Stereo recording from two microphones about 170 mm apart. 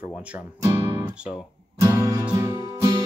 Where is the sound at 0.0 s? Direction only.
5° right (ahead or behind).